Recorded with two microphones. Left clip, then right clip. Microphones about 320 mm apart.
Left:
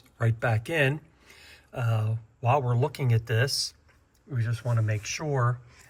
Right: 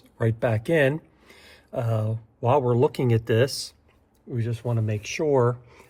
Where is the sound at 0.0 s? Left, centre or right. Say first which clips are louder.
Right 4 dB; centre.